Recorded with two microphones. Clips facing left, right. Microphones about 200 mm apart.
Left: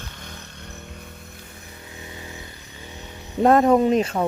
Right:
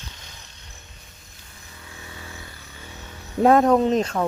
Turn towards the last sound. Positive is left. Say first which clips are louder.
# left 1 dB
turn(degrees=10)  # may be behind; listen again after turning